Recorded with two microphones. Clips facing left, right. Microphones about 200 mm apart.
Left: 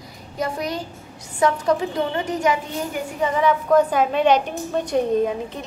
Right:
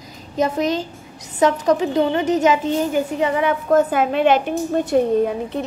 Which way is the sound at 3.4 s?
50° right (ahead or behind).